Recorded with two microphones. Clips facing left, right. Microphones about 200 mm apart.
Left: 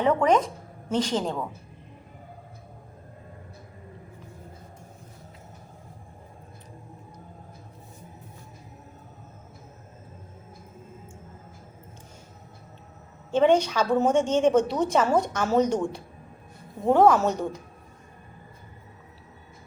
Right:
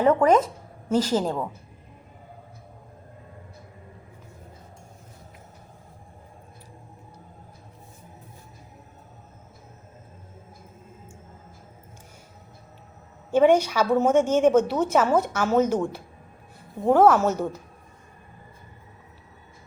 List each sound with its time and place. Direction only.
0.0 s a woman's voice: 5° right (ahead or behind)
13.3 s a woman's voice: 10° right (ahead or behind)